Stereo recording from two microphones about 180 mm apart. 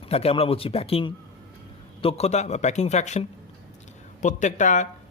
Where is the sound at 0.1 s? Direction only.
35° left (ahead or behind).